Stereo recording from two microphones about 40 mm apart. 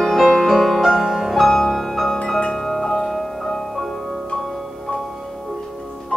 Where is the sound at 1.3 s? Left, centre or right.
Centre.